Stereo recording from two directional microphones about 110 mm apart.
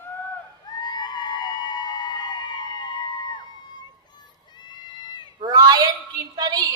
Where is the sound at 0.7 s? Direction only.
40° left (ahead or behind).